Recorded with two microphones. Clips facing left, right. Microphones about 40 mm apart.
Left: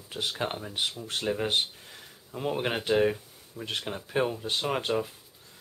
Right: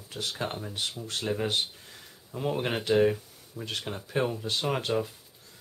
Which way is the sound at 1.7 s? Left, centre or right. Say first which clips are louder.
Left 1 dB; centre.